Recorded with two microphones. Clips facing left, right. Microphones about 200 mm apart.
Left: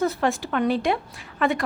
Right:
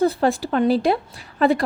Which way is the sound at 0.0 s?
35° right (ahead or behind).